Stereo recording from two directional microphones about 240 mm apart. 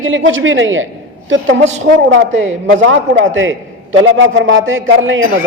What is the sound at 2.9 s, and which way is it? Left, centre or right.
A man's voice, right.